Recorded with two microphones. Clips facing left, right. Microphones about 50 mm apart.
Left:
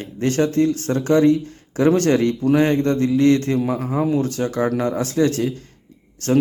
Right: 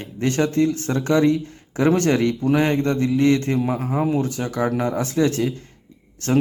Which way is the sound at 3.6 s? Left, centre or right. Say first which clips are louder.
Left 1 dB; centre.